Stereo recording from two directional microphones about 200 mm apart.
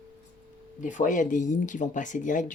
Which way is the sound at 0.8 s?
40° left (ahead or behind).